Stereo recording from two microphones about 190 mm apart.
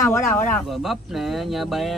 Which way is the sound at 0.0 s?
10° left (ahead or behind).